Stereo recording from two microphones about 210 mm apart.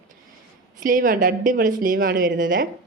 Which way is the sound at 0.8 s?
40° right (ahead or behind).